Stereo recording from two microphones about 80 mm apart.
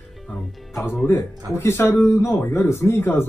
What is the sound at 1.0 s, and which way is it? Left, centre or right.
Speech, left.